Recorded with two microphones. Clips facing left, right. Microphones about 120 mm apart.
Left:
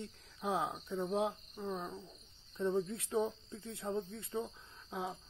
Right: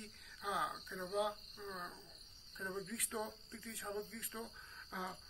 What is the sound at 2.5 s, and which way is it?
Speech, 30° left (ahead or behind).